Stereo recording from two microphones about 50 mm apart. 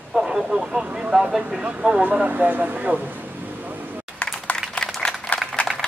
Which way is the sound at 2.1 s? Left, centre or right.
Right.